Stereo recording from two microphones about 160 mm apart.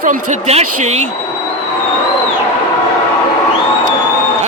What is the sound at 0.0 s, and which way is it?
A man's voice, 55° right (ahead or behind).